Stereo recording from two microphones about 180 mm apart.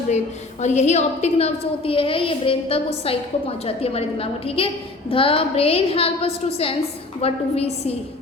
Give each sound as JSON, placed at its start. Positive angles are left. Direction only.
{"t": 0.6, "sound": "a woman's voice", "side_deg": 40}